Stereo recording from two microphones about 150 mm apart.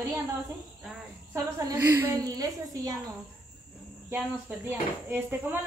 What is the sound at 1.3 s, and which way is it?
A woman's voice, 25° right (ahead or behind).